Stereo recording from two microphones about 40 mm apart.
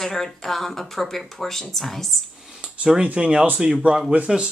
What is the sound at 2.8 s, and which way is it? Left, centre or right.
Speech, right.